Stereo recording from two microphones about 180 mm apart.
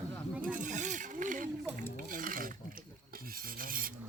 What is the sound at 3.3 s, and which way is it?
Filing, 50° right (ahead or behind).